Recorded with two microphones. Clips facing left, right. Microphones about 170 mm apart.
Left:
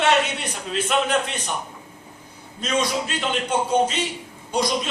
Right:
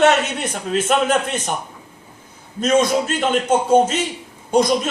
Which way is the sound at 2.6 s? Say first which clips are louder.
Right 7 dB; 45° right (ahead or behind).